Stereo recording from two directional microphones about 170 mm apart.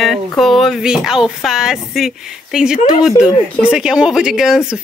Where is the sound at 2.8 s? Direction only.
45° left (ahead or behind).